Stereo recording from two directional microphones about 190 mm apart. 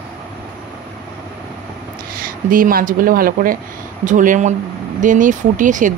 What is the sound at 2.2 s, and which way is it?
Speech, 45° right (ahead or behind).